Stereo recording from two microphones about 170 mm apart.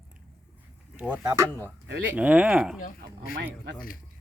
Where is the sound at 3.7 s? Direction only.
55° left (ahead or behind).